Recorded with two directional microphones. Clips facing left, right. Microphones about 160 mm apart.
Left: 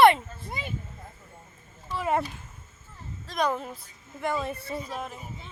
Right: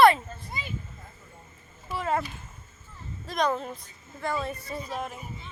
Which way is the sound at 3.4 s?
10° left (ahead or behind).